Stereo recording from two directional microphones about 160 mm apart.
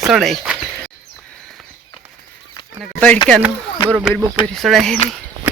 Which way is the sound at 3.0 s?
10° left (ahead or behind).